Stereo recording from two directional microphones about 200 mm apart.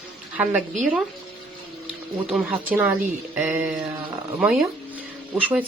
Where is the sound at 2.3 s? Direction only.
5° right (ahead or behind).